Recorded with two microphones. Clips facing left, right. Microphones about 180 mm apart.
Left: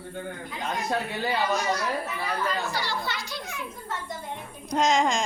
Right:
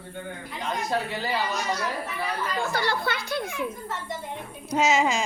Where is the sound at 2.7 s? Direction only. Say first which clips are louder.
Right 4 dB; 55° right (ahead or behind).